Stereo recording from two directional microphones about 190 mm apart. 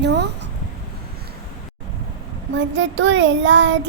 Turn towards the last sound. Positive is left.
turn(degrees=-75)  # may be behind; listen again after turning